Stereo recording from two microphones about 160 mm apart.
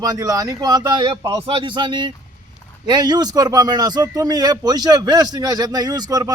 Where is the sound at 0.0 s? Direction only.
20° right (ahead or behind).